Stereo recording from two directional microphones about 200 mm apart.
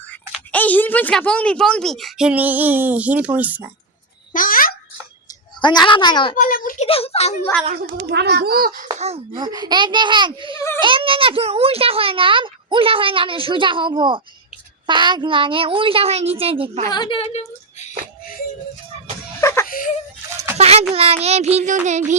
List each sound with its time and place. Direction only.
0.1 s a woman's voice: 10° left (ahead or behind); by 3.7 s 10° right (ahead or behind)
4.4 s babbling: 45° left (ahead or behind)
5.6 s a child's voice: 25° left (ahead or behind)
6.3 s a child's voice: 45° left (ahead or behind)
6.8 s speech: 30° left (ahead or behind)
8.1 s speech: 55° right (ahead or behind)
9.0 s a child's voice: 30° right (ahead or behind)
16.9 s music: 25° left (ahead or behind)
19.4 s a sound: 15° left (ahead or behind)
19.6 s whimper: 45° left (ahead or behind)
20.6 s a sound: 30° right (ahead or behind)
20.9 s child singing: 30° right (ahead or behind)